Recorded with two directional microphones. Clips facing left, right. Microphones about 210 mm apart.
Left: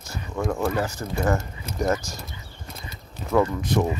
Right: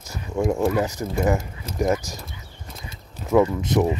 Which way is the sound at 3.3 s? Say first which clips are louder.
Right 3 dB; 15° right (ahead or behind).